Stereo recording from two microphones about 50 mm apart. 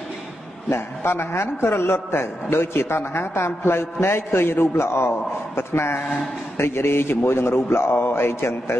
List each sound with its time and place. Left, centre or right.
0.7 s a man's voice: left